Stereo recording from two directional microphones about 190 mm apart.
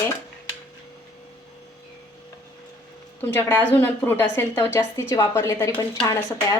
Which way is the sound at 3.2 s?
10° left (ahead or behind).